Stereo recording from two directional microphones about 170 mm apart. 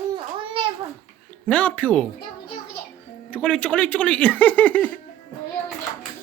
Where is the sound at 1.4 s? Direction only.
10° left (ahead or behind).